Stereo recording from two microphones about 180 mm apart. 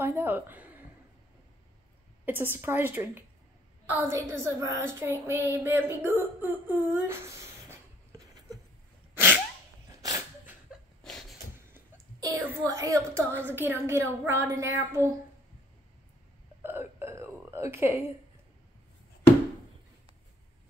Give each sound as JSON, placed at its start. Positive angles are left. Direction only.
{"t": 0.0, "sound": "a woman's voice", "side_deg": -10}
{"t": 2.2, "sound": "a woman's voice", "side_deg": -10}
{"t": 9.1, "sound": "sneeze", "side_deg": -10}
{"t": 10.0, "sound": "a sound", "side_deg": -20}
{"t": 11.7, "sound": "a woman's voice", "side_deg": -20}
{"t": 16.6, "sound": "a sound", "side_deg": -15}